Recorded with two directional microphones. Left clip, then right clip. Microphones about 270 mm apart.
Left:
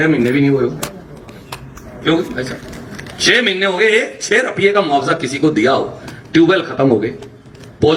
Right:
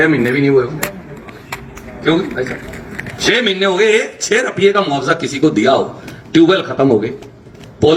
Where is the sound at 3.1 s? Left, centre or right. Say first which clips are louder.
Left 1 dB; right.